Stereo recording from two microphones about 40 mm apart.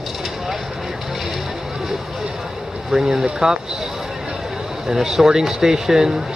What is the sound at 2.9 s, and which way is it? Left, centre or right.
Speech, centre.